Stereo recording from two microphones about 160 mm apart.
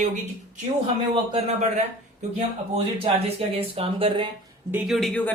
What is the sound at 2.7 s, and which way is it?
Speech, 40° right (ahead or behind).